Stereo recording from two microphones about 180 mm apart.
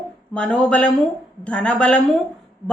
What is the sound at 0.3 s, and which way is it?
A woman's voice, 5° left (ahead or behind).